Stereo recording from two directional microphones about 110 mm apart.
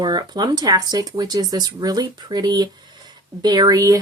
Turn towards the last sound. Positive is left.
turn(degrees=-35)  # may be behind; listen again after turning